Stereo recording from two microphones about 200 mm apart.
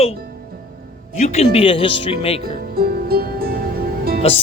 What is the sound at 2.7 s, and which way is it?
Music, 50° right (ahead or behind).